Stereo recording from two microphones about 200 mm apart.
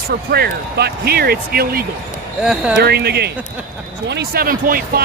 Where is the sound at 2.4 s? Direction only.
5° right (ahead or behind).